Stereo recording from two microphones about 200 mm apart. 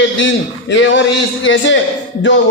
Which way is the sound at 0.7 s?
65° left (ahead or behind).